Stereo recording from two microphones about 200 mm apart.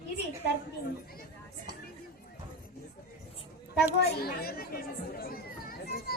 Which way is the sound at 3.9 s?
50° left (ahead or behind).